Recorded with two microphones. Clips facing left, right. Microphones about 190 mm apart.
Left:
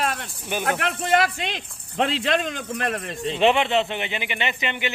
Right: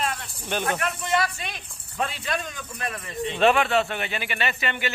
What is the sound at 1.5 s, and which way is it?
Speech, 90° left.